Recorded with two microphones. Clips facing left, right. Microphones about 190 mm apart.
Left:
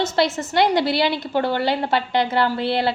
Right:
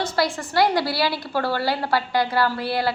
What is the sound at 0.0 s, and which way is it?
A woman's voice, 20° left (ahead or behind).